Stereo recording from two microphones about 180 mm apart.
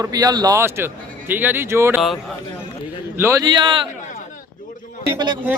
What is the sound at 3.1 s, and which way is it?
Speech, 15° right (ahead or behind).